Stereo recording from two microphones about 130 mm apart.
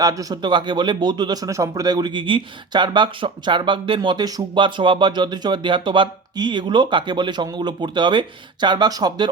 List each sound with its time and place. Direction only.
0.0 s speech: 30° right (ahead or behind)